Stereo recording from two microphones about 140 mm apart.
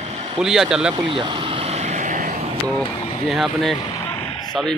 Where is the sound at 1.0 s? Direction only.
35° right (ahead or behind); by 2.4 s 60° right (ahead or behind).